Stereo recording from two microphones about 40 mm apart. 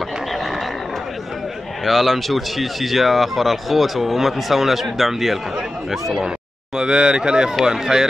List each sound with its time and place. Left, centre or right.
1.9 s speech: centre
6.8 s speech: right